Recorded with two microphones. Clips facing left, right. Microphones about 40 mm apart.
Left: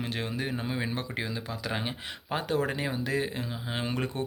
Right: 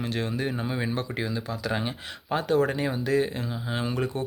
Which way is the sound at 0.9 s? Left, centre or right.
Centre.